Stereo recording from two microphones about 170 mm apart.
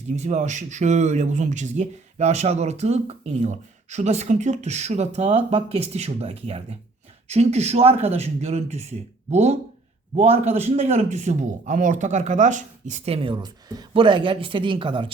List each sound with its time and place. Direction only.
0.1 s speech: 45° right (ahead or behind)